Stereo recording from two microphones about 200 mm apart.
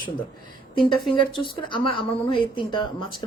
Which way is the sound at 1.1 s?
25° left (ahead or behind).